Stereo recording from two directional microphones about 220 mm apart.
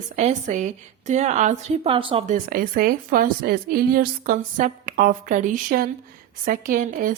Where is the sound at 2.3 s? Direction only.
40° right (ahead or behind).